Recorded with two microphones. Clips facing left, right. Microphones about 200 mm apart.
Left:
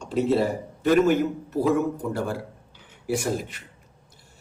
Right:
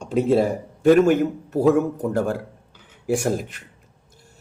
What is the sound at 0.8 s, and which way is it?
A man's voice, 50° right (ahead or behind).